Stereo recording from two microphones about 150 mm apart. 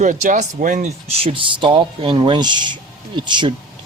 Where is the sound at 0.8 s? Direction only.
40° right (ahead or behind).